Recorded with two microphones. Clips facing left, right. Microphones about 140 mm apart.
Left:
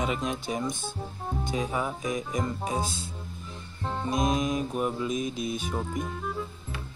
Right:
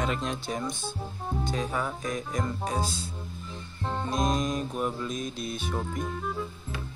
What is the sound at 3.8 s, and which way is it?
Music, centre (ahead or behind).